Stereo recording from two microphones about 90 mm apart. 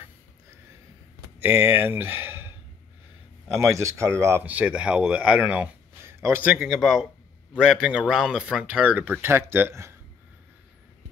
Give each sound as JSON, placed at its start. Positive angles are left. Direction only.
{"t": 1.4, "sound": "speech", "side_deg": -25}
{"t": 3.5, "sound": "speech", "side_deg": -35}
{"t": 4.5, "sound": "speech", "side_deg": -15}
{"t": 6.0, "sound": "a sound", "side_deg": -30}
{"t": 6.4, "sound": "speech", "side_deg": -15}
{"t": 6.7, "sound": "speech", "side_deg": -5}